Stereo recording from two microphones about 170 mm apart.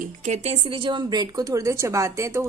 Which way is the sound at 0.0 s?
45° right (ahead or behind).